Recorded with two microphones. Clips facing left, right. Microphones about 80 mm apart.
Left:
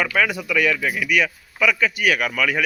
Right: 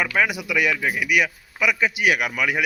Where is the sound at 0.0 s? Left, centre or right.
Centre.